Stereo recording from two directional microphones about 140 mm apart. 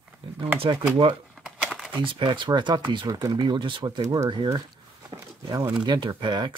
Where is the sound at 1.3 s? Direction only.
5° right (ahead or behind).